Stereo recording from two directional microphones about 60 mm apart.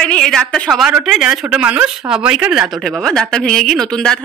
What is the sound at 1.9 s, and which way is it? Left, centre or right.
Speech, centre.